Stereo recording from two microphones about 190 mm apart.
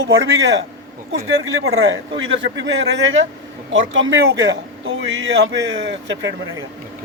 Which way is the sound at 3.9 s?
75° right (ahead or behind).